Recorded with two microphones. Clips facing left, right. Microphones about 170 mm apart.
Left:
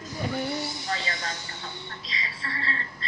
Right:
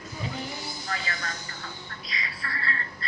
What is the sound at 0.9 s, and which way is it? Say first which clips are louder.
A woman's voice: even; 30° left (ahead or behind).